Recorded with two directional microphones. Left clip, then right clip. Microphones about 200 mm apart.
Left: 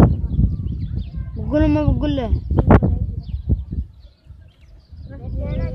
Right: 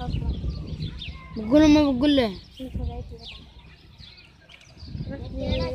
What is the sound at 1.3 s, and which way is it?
Speech, 5° right (ahead or behind).